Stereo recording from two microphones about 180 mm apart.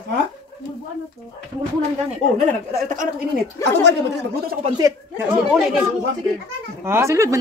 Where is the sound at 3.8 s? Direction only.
70° right (ahead or behind).